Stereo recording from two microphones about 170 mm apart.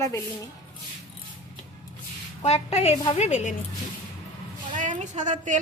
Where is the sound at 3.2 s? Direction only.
40° left (ahead or behind).